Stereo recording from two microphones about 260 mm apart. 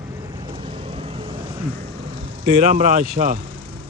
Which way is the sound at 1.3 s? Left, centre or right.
Right.